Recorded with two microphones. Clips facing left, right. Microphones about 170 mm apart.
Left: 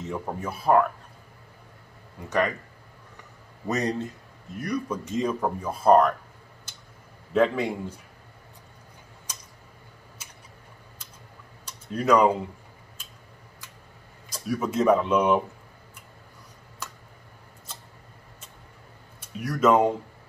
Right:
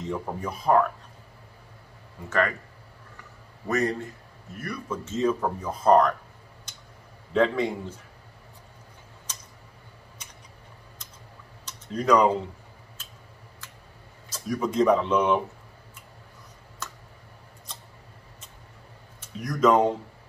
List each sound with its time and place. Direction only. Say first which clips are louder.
0.0 s speech: right 1 dB; 5° left (ahead or behind)
2.2 s speech: left 1 dB; 15° left (ahead or behind)
3.6 s a man's voice: right 1 dB; 20° left (ahead or behind)
7.3 s speech: even; 10° left (ahead or behind)
10.2 s a sound: right 1 dB; 5° left (ahead or behind)
11.6 s typing: even; 10° left (ahead or behind)
14.3 s speech: even; 5° left (ahead or behind)
19.1 s speech: left 1 dB; 10° left (ahead or behind)